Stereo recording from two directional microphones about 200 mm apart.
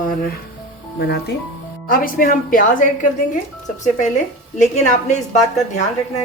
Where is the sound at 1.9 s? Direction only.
45° left (ahead or behind).